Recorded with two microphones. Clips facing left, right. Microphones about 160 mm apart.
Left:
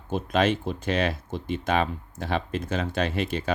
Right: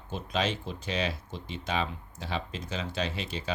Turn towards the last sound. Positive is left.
turn(degrees=55)  # may be behind; listen again after turning